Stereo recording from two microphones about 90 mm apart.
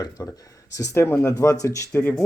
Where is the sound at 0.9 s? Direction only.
20° left (ahead or behind).